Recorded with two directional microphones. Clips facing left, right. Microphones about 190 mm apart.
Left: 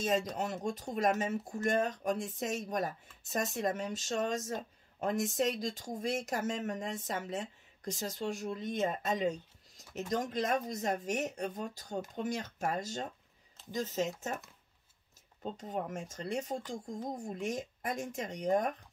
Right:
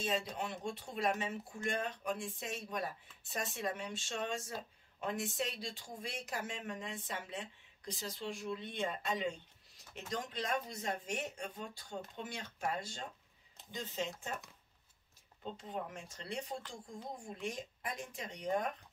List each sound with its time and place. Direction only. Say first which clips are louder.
0.0 s speech: left 5 dB; 40° left (ahead or behind)
15.4 s speech: left 5 dB; 40° left (ahead or behind)